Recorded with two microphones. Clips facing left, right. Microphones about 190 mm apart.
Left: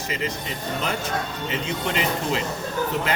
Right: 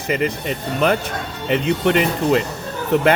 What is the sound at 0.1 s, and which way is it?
Speech, 60° right (ahead or behind).